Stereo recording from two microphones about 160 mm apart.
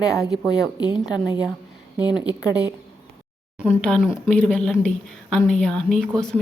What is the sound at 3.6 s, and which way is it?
Speech, 5° left (ahead or behind).